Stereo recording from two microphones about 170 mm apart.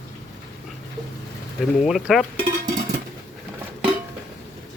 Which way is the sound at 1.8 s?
Centre (ahead or behind).